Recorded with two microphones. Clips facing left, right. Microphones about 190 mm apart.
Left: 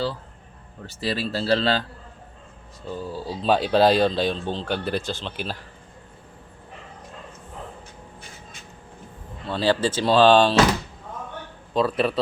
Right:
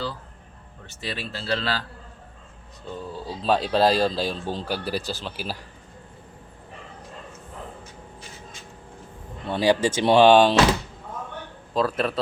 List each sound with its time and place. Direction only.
0.9 s speech: 35° left (ahead or behind)
3.0 s speech: centre (ahead or behind)
9.5 s speech: 15° right (ahead or behind)
11.7 s speech: centre (ahead or behind)